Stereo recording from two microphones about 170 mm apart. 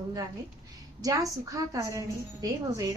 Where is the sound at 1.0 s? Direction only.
20° right (ahead or behind).